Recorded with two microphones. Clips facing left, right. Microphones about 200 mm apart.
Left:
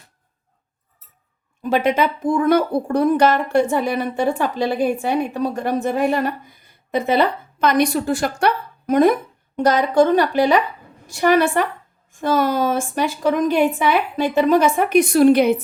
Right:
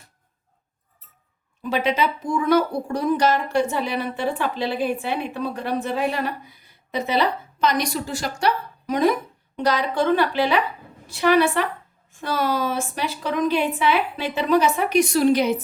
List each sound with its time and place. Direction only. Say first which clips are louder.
1.7 s speech: left 4 dB; 50° left (ahead or behind)